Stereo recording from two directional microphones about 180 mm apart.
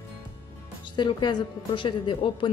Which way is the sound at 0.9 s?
25° left (ahead or behind).